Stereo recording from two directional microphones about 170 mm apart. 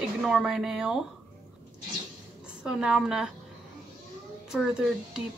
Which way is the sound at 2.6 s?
5° right (ahead or behind).